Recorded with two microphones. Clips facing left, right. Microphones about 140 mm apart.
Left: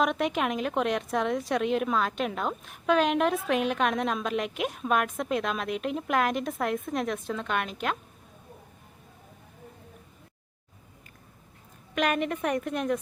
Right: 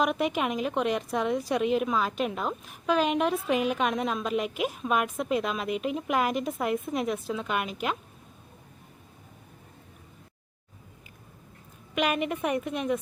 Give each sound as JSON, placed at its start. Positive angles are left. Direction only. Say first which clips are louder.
{"t": 0.0, "sound": "a woman's voice", "louder": "even", "side_deg": 0}
{"t": 11.9, "sound": "a woman's voice", "louder": "even", "side_deg": -5}